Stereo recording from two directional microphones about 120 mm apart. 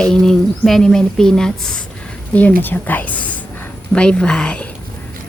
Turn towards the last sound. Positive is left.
turn(degrees=10)  # may be behind; listen again after turning